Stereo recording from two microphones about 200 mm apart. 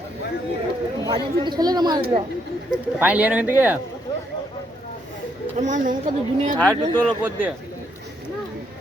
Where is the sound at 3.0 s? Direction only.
5° right (ahead or behind).